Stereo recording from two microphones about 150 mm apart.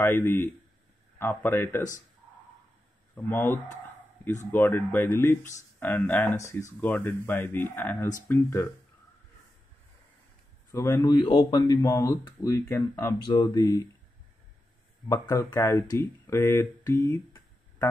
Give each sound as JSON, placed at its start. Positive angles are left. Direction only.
{"t": 0.0, "sound": "speech", "side_deg": 15}
{"t": 3.3, "sound": "speech", "side_deg": 15}
{"t": 10.7, "sound": "speech", "side_deg": 20}
{"t": 15.0, "sound": "speech", "side_deg": 25}